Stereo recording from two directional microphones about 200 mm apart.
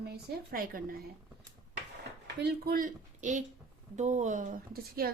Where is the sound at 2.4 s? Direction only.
50° right (ahead or behind).